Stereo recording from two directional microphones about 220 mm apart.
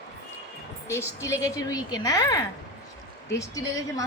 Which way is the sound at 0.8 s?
10° left (ahead or behind).